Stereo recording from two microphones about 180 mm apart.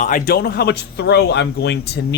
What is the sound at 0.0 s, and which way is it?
Speech, 55° left (ahead or behind).